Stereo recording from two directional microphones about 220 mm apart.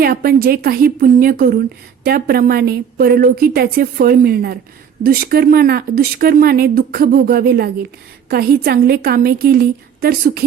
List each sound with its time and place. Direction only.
0.0 s speech: 45° right (ahead or behind)